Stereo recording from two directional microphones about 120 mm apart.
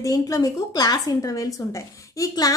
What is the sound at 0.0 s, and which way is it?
A woman's voice, 30° left (ahead or behind).